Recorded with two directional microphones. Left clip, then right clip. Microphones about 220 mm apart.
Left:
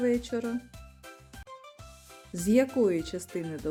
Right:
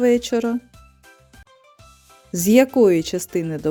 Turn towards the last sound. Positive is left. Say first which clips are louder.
# right 11 dB
turn(degrees=-40)  # may be behind; listen again after turning